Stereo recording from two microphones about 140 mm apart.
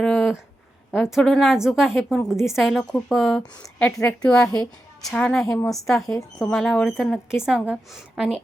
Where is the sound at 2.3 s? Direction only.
20° left (ahead or behind).